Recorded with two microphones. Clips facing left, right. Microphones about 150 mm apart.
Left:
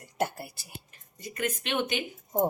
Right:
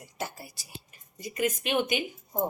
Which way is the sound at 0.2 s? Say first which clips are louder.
Left 7 dB; 60° left (ahead or behind).